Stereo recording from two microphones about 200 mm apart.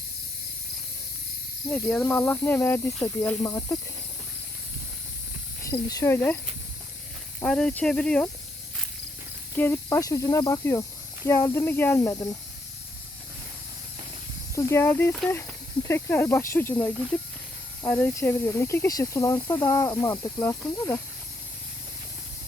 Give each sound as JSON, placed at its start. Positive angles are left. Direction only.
{"t": 1.7, "sound": "speech", "side_deg": 10}
{"t": 5.7, "sound": "speech", "side_deg": 20}
{"t": 7.4, "sound": "speech", "side_deg": 5}
{"t": 9.6, "sound": "speech", "side_deg": 10}
{"t": 14.5, "sound": "speech", "side_deg": 15}